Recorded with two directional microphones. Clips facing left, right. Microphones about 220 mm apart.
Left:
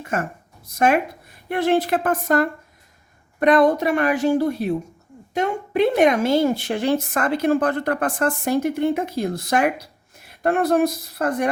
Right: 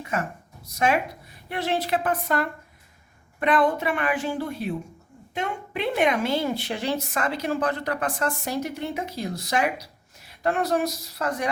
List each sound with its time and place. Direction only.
0.0 s a woman's voice: 50° left (ahead or behind)